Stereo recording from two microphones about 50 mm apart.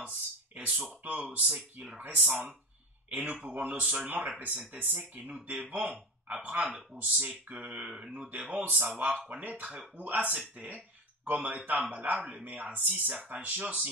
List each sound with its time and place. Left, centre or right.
0.7 s speech: centre
1.0 s speech: right
7.6 s speech: right
8.3 s speech: right